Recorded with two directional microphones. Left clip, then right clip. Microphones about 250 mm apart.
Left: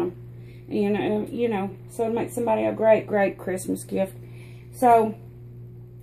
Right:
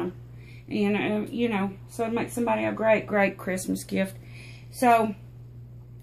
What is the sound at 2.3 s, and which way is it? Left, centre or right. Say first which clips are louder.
Speech: left 3 dB; right.